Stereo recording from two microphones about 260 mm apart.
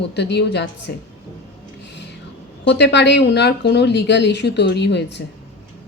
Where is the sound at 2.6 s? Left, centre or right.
Left.